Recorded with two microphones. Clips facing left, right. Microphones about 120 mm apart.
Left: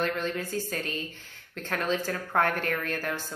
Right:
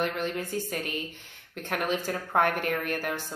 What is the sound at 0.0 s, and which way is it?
A woman's voice, 15° right (ahead or behind).